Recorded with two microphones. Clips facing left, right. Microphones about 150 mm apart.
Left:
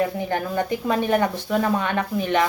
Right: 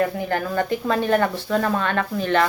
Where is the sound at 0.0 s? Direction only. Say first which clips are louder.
Right 1 dB; 15° left (ahead or behind).